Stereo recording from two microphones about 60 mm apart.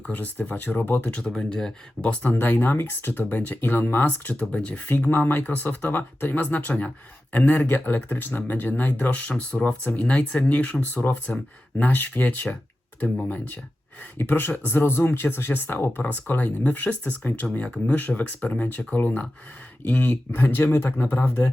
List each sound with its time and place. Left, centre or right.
0.0 s speech: left
1.2 s speech: centre
2.0 s speech: left
3.2 s speech: left
14.8 s speech: left